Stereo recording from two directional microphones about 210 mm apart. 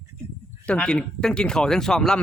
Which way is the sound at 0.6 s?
5° left (ahead or behind).